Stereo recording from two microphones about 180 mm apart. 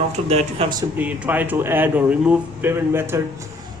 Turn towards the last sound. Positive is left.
turn(degrees=-15)  # may be behind; listen again after turning